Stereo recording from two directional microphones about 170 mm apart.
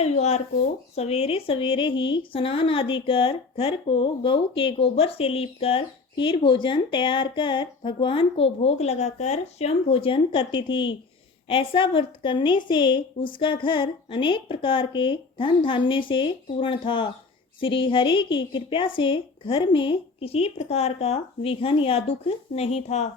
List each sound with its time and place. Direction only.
0.0 s a woman's voice: 40° left (ahead or behind)